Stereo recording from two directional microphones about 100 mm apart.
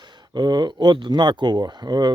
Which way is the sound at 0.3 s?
45° right (ahead or behind).